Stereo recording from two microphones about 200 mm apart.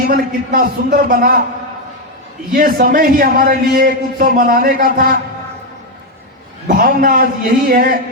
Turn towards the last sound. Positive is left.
turn(degrees=-45)  # may be behind; listen again after turning